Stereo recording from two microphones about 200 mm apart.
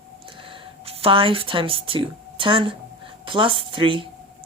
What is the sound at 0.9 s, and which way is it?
A woman's voice, 30° right (ahead or behind).